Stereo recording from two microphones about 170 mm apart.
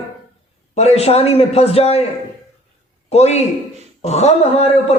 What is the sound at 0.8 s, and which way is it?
A man's voice, 40° left (ahead or behind).